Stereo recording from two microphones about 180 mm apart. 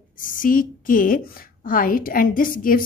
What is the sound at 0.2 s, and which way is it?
A woman's voice, 50° left (ahead or behind).